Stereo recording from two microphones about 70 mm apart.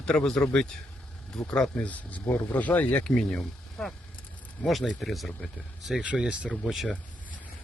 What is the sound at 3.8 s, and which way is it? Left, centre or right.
Speech, centre.